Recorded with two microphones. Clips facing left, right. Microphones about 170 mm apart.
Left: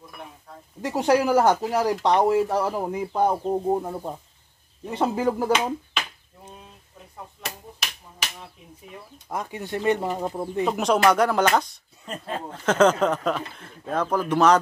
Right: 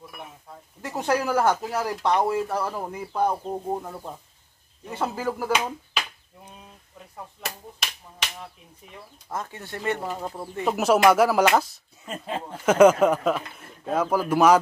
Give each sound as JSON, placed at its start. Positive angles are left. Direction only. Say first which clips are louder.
{"t": 0.8, "sound": "speech", "louder": "left 5 dB", "side_deg": 15}
{"t": 9.3, "sound": "speech", "louder": "left 4 dB", "side_deg": 15}
{"t": 10.6, "sound": "speech", "louder": "right 1 dB", "side_deg": -5}